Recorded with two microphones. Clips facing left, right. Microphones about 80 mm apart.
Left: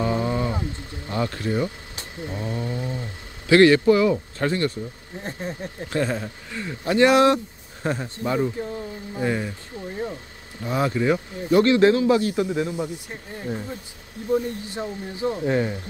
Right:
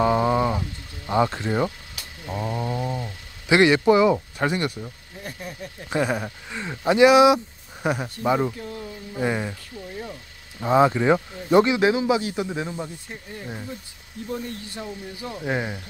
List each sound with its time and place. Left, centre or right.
0.0 s a sound: right
1.0 s speech: right
2.3 s mantra: right
3.4 s a man's voice: centre
5.2 s speech: left
5.9 s speech: centre
7.0 s speech: centre
8.5 s speech: left
9.2 s speech: centre
10.6 s speech: right
11.6 s a man's voice: centre
12.4 s a man's voice: centre
12.7 s speech: centre
15.4 s a man's voice: centre